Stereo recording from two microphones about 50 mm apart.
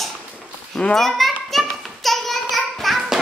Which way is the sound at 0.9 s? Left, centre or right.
Centre.